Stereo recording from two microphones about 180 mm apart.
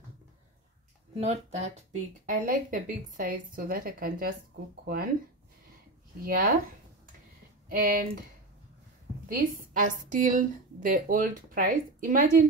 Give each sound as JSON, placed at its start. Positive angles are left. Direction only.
{"t": 1.1, "sound": "speech", "side_deg": -35}
{"t": 1.9, "sound": "a woman's voice", "side_deg": -50}
{"t": 6.2, "sound": "a woman's voice", "side_deg": -55}
{"t": 7.7, "sound": "a woman's voice", "side_deg": -50}
{"t": 9.3, "sound": "a woman's voice", "side_deg": -50}